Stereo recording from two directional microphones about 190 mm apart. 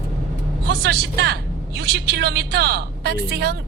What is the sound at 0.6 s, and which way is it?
A woman's voice, 60° right (ahead or behind).